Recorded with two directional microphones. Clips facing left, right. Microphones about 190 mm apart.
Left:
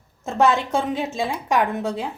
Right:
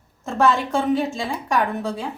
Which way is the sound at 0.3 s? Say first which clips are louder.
Even; 20° left (ahead or behind).